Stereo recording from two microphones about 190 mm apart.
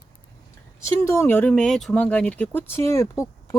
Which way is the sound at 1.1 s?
15° left (ahead or behind).